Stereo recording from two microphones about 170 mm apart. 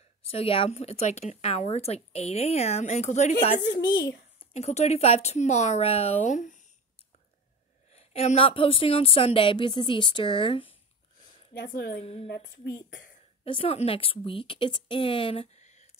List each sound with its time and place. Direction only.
0.3 s speech: 35° left (ahead or behind)
3.7 s a child's voice: 70° left (ahead or behind)
4.4 s speech: 40° left (ahead or behind)
7.9 s speech: 40° left (ahead or behind)
11.5 s a woman's voice: 70° left (ahead or behind)
12.0 s speech: 35° left (ahead or behind)
13.4 s speech: 35° left (ahead or behind)